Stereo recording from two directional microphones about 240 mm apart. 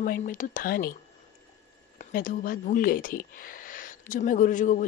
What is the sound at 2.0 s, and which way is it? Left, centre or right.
Speech, left.